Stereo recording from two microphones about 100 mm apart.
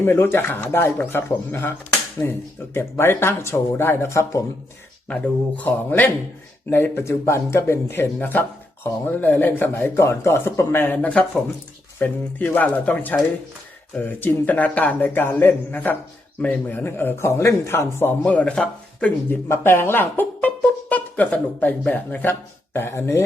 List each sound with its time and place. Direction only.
0.0 s speech: 20° left (ahead or behind)
2.7 s speech: 25° left (ahead or behind)
5.0 s a man's voice: 15° left (ahead or behind)
18.2 s speech: 10° left (ahead or behind)
19.5 s speech: 25° left (ahead or behind)